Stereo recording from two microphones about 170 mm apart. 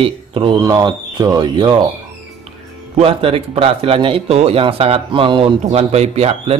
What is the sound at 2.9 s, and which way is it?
A man's voice, 35° right (ahead or behind).